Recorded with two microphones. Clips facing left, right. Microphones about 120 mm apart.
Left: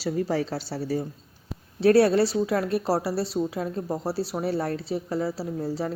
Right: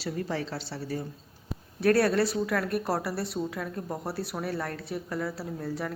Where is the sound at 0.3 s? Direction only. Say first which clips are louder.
Left 6 dB; 40° left (ahead or behind).